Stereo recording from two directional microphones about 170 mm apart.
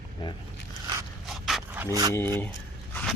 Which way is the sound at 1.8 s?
20° right (ahead or behind).